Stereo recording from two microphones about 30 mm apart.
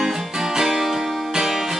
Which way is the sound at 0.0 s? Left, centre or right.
Centre.